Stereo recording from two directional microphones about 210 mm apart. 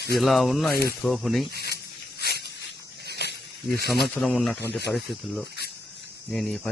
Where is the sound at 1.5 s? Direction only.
50° left (ahead or behind).